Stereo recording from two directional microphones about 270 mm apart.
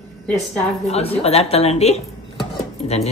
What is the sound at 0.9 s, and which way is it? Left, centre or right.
Speech, left.